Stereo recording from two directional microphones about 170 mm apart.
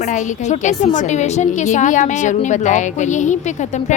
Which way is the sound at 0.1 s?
45° left (ahead or behind).